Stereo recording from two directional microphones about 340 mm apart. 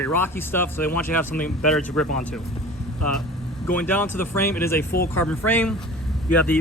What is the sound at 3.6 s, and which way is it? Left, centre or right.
Speech, centre.